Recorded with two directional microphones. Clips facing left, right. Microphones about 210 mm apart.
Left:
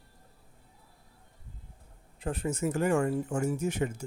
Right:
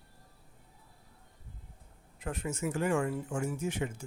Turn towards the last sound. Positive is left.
turn(degrees=40)  # may be behind; listen again after turning